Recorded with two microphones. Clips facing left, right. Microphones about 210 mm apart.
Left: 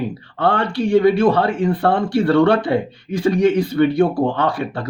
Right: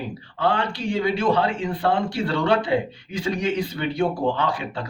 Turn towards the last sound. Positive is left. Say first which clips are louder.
# left 5 dB
turn(degrees=55)  # may be behind; listen again after turning